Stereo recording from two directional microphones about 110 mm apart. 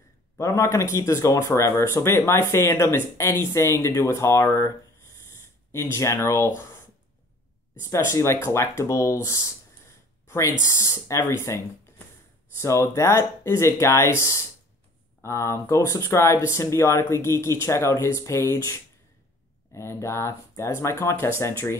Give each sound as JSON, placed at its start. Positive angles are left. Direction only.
{"t": 0.4, "sound": "speech", "side_deg": 25}
{"t": 5.7, "sound": "speech", "side_deg": 25}
{"t": 7.8, "sound": "speech", "side_deg": 25}